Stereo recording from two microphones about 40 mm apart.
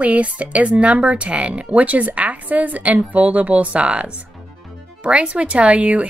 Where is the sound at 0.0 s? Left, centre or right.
Right.